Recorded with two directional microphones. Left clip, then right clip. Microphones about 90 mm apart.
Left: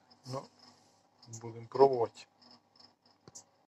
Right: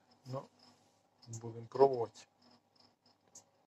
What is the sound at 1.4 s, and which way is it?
Speech, 20° right (ahead or behind).